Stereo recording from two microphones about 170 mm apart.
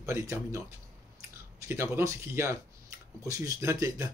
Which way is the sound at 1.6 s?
15° right (ahead or behind).